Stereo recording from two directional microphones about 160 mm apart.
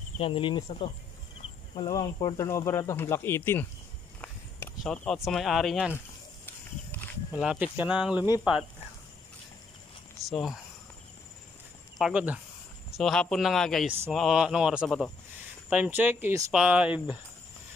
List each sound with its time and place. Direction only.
0.2 s speech: 35° left (ahead or behind); by 5.9 s centre (ahead or behind)
6.4 s wild animals: 10° left (ahead or behind)
7.3 s speech: 5° right (ahead or behind)
10.3 s speech: centre (ahead or behind)
12.0 s speech: 10° right (ahead or behind)
12.9 s speech: 5° left (ahead or behind)